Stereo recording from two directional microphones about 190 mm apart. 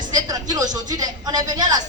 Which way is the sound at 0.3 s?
20° right (ahead or behind).